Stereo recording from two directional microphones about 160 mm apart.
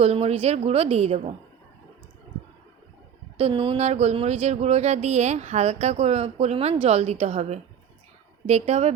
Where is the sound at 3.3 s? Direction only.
35° right (ahead or behind).